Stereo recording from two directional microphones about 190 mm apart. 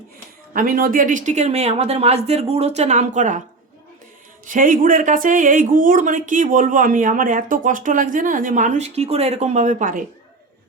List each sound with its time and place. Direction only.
0.5 s speech: 50° right (ahead or behind)
4.4 s speech: 45° right (ahead or behind)